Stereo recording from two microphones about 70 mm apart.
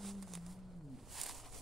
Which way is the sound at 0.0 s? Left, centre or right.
Centre.